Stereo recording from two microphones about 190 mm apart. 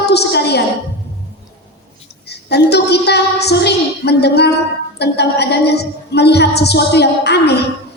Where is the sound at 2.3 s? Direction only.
60° left (ahead or behind).